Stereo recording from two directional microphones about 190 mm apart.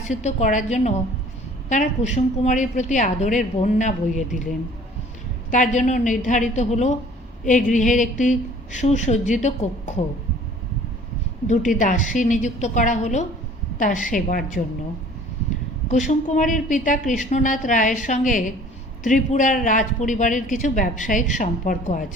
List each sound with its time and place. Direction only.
0.0 s a woman's voice: 40° left (ahead or behind)
5.5 s a woman's voice: 40° left (ahead or behind)
11.4 s a woman's voice: 40° left (ahead or behind)
15.9 s speech: 40° left (ahead or behind)